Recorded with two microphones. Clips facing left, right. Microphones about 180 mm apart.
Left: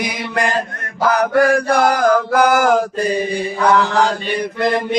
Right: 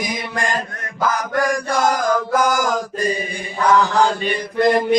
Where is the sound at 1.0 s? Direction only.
65° left (ahead or behind).